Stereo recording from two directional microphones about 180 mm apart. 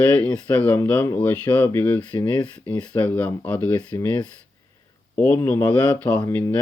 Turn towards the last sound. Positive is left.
turn(degrees=10)  # may be behind; listen again after turning